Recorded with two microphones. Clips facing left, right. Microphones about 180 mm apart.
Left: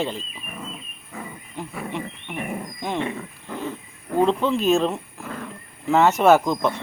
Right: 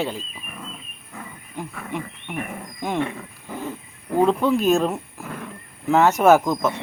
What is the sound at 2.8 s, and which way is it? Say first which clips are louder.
Speech: right 3 dB; 10° right (ahead or behind).